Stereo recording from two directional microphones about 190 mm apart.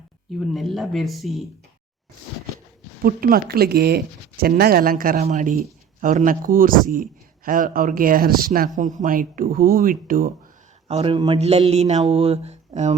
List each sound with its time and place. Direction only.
0.3 s speech: centre (ahead or behind)
3.0 s speech: 50° right (ahead or behind)
5.2 s a sound: 40° right (ahead or behind)
6.0 s speech: 45° right (ahead or behind)
10.8 s a sound: 30° right (ahead or behind)
12.0 s speech: 30° right (ahead or behind)